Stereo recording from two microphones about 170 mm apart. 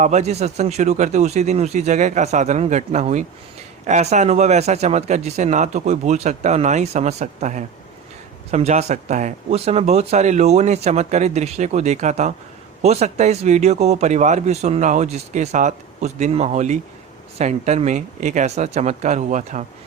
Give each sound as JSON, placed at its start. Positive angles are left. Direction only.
{"t": 0.0, "sound": "speech", "side_deg": -40}